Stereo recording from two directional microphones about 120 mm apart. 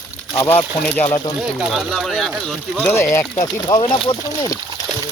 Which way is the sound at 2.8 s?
20° left (ahead or behind).